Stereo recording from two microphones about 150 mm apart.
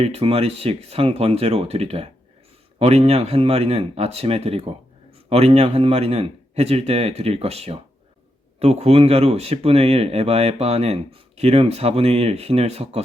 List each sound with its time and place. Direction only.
0.0 s speech: 40° right (ahead or behind)